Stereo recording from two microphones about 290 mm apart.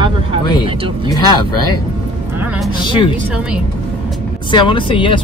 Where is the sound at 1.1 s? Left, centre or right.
Centre.